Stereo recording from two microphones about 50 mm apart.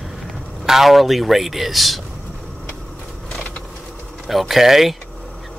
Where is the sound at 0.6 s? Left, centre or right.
Centre.